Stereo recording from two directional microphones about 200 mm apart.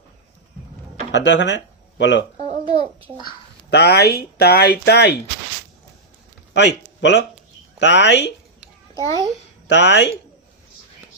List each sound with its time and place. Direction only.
1.1 s speech: 60° left (ahead or behind)
2.4 s a sound: 30° right (ahead or behind)
3.2 s speech: 55° left (ahead or behind)
6.5 s a man's voice: 60° left (ahead or behind)
9.0 s a child's voice: 15° left (ahead or behind)
9.6 s speech: 60° left (ahead or behind)